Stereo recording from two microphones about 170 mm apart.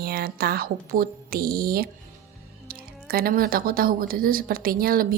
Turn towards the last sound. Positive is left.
turn(degrees=-60)  # may be behind; listen again after turning